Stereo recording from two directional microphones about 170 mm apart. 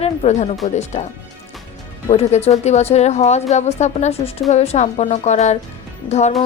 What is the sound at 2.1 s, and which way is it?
A woman's voice, 35° left (ahead or behind).